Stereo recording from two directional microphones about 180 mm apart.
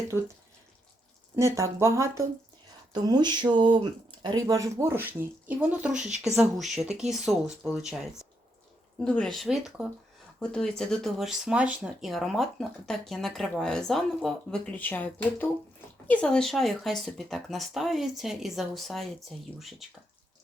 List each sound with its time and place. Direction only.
1.4 s speech: 15° right (ahead or behind)
2.9 s a sound: 25° right (ahead or behind)
4.2 s speech: 25° right (ahead or behind)
5.9 s a woman's voice: 40° right (ahead or behind)
6.3 s speech: 5° right (ahead or behind)